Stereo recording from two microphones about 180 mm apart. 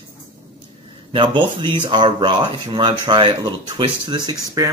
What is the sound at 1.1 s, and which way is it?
Speech, 25° right (ahead or behind).